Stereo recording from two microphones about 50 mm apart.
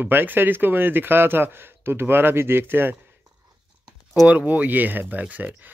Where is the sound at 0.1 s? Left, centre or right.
Right.